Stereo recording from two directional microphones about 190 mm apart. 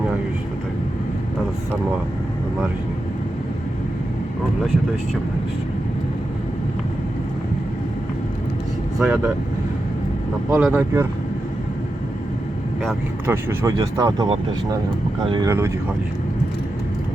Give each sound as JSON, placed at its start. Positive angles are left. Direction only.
{"t": 9.0, "sound": "speech", "side_deg": -5}
{"t": 10.5, "sound": "speech", "side_deg": -10}
{"t": 13.2, "sound": "speech", "side_deg": -10}